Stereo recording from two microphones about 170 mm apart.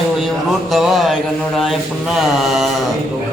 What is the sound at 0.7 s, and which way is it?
Speech, centre (ahead or behind).